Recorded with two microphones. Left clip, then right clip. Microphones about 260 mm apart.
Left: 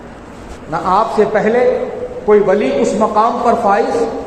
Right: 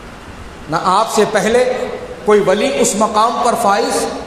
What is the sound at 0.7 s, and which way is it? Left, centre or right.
A man's voice, right.